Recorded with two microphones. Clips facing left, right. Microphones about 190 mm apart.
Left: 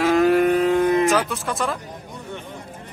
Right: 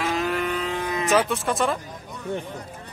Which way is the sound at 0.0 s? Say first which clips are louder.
Left 9 dB; 50° left (ahead or behind).